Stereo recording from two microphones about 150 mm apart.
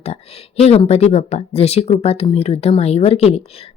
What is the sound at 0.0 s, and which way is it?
A woman's voice, 40° left (ahead or behind).